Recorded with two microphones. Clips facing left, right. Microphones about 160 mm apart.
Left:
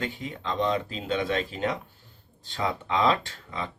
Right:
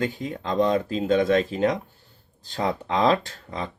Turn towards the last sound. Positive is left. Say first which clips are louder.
# right 3 dB
turn(degrees=-40)  # may be behind; listen again after turning